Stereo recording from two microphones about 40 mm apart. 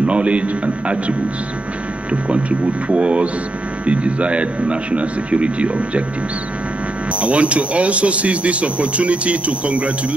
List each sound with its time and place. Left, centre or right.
0.0 s a man's voice: right
2.9 s a man's voice: right
7.2 s speech: right